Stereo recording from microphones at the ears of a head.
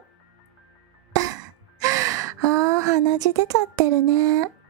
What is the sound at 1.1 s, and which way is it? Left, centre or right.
A woman's voice, right.